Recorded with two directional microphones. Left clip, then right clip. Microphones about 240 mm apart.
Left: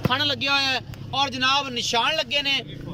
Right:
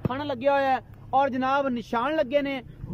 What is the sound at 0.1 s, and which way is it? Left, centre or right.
Speech, right.